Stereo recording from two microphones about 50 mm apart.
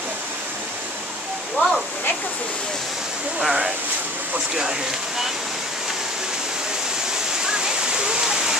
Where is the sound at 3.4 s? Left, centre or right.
Centre.